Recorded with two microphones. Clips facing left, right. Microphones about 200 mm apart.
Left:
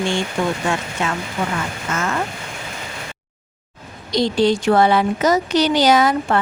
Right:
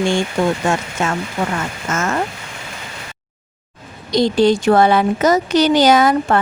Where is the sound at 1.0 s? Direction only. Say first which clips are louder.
Right 3 dB; 45° right (ahead or behind).